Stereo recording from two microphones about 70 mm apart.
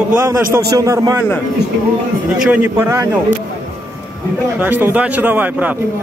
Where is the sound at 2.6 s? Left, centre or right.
Right.